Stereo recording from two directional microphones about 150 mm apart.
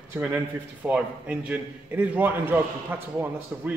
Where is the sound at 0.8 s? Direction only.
5° right (ahead or behind).